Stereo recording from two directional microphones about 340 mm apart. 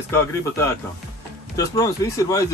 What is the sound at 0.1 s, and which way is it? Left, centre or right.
Speech, centre.